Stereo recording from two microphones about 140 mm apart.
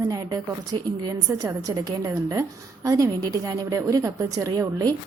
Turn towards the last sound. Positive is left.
turn(degrees=-25)  # may be behind; listen again after turning